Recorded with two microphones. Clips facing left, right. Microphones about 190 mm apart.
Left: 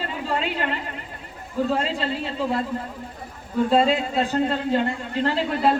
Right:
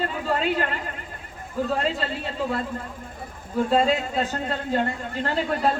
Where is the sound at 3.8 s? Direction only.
45° right (ahead or behind).